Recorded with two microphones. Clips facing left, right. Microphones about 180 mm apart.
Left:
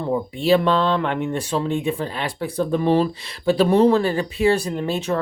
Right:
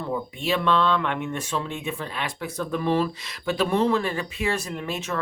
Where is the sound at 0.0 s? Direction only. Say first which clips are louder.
Left 6 dB; 30° left (ahead or behind).